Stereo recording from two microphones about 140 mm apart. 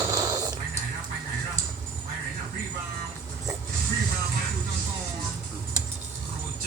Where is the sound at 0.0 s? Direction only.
30° right (ahead or behind).